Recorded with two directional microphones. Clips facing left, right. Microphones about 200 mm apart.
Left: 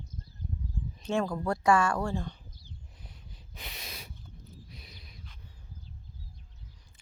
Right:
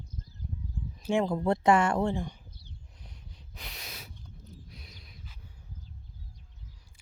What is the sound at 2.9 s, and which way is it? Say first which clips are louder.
Snort: even; 5° left (ahead or behind).